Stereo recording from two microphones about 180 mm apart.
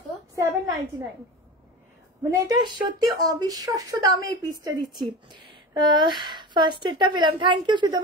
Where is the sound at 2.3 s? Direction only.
20° right (ahead or behind).